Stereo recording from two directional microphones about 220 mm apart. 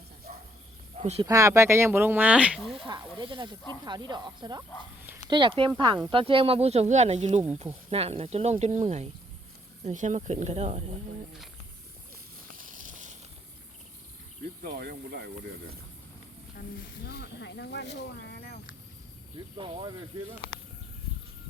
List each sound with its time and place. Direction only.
0.9 s speech: 25° right (ahead or behind)
1.3 s speech: 15° right (ahead or behind)
2.7 s speech: 20° right (ahead or behind)
12.5 s a sound: 35° right (ahead or behind)
14.6 s speech: 45° right (ahead or behind)
16.6 s snake: 45° left (ahead or behind)
19.5 s speech: 25° right (ahead or behind)